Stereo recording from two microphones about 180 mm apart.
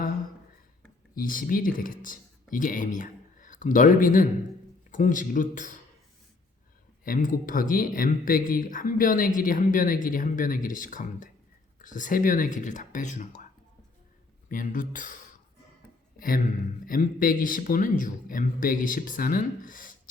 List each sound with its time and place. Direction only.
1.1 s speech: 50° left (ahead or behind)
7.0 s speech: 50° left (ahead or behind)
14.5 s speech: 45° left (ahead or behind)